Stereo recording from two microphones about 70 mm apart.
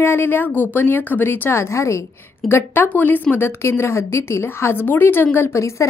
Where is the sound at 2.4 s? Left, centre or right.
Left.